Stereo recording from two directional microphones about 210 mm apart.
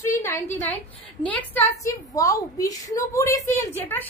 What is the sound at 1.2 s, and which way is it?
A woman's voice, 5° left (ahead or behind).